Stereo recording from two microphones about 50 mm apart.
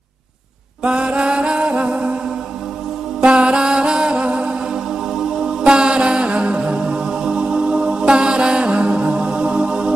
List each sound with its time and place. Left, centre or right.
0.8 s music: right
3.2 s music: right
5.6 s mantra: centre